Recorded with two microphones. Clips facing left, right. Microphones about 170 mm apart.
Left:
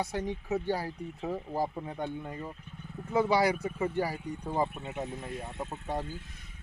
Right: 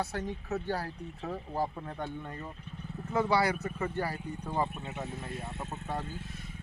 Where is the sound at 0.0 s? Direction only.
15° left (ahead or behind).